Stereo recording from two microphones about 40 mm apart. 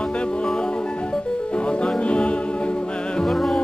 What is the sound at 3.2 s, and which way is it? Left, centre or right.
Music, centre.